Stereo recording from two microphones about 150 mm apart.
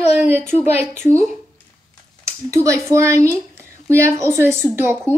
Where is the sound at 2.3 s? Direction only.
20° right (ahead or behind).